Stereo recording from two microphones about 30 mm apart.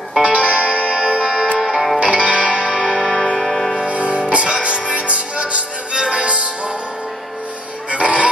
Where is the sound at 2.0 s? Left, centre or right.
Right.